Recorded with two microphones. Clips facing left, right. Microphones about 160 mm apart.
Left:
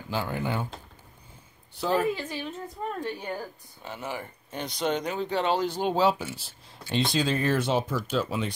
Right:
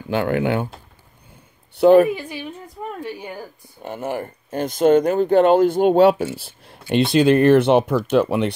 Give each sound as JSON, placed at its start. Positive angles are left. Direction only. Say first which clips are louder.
{"t": 0.1, "sound": "speech", "louder": "right 10 dB", "side_deg": -70}
{"t": 1.8, "sound": "speech", "louder": "right 15 dB", "side_deg": -65}
{"t": 2.0, "sound": "a woman's voice", "louder": "right 4 dB", "side_deg": -15}
{"t": 3.8, "sound": "speech", "louder": "right 9 dB", "side_deg": -55}